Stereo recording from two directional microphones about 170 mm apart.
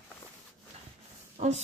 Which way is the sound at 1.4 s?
40° right (ahead or behind).